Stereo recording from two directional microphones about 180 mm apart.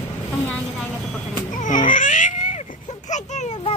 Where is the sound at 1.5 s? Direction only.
45° left (ahead or behind).